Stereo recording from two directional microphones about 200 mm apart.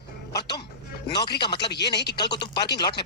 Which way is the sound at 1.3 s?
55° left (ahead or behind).